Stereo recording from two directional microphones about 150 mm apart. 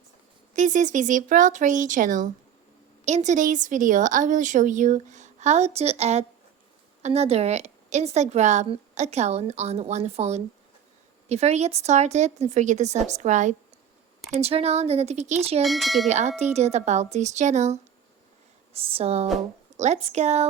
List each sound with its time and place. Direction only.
0.5 s a woman's voice: 55° right (ahead or behind)
3.0 s a woman's voice: 50° right (ahead or behind)
14.3 s a woman's voice: 45° right (ahead or behind)
15.6 s speech: centre (ahead or behind)
16.0 s a woman's voice: 50° right (ahead or behind)
18.7 s a woman's voice: 40° right (ahead or behind)